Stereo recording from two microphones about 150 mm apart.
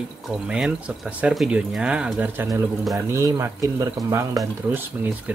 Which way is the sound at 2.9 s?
20° right (ahead or behind).